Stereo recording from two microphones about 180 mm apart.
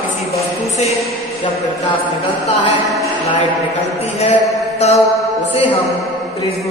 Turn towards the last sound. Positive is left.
turn(degrees=35)  # may be behind; listen again after turning